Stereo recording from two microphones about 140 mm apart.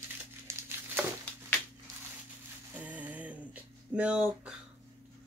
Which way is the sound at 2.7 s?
10° right (ahead or behind).